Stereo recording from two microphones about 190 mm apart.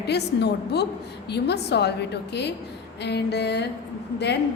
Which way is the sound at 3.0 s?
60° left (ahead or behind).